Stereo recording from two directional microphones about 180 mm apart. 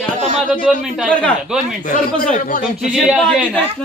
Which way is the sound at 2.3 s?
45° left (ahead or behind).